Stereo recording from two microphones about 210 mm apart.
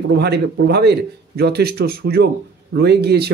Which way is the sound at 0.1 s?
50° right (ahead or behind).